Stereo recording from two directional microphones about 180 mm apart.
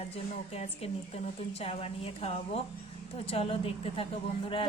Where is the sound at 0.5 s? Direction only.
35° left (ahead or behind).